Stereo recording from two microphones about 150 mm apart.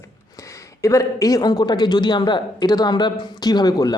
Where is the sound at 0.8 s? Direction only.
20° left (ahead or behind).